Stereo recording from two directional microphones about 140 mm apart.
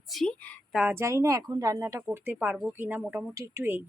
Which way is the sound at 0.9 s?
20° right (ahead or behind).